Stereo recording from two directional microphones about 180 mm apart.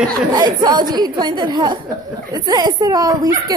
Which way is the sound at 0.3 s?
20° right (ahead or behind).